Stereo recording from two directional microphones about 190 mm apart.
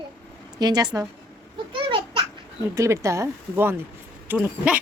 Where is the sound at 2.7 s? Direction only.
15° right (ahead or behind).